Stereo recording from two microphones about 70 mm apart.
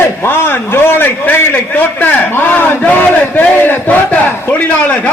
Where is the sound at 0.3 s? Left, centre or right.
Left.